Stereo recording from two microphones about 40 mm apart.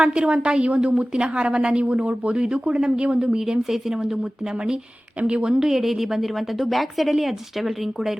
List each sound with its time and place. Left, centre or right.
0.0 s a woman's voice: right
3.6 s a woman's voice: centre